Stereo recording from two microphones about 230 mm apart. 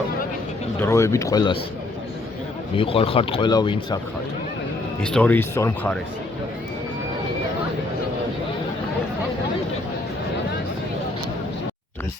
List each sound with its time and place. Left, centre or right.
0.8 s speech: centre
2.7 s speech: left
5.0 s speech: centre